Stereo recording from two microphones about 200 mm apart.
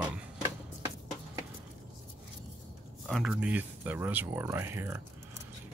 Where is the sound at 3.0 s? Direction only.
Centre (ahead or behind).